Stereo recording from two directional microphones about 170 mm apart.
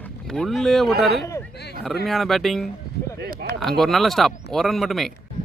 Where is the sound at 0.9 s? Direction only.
70° right (ahead or behind).